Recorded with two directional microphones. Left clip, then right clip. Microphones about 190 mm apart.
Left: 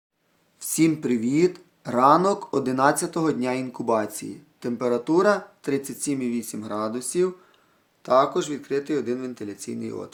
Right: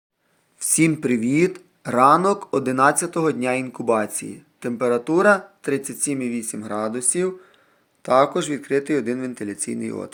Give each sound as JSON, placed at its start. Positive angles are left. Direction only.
{"t": 0.6, "sound": "speech", "side_deg": -20}